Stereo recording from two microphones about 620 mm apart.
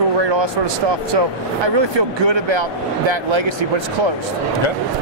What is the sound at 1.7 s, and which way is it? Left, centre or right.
Speech, right.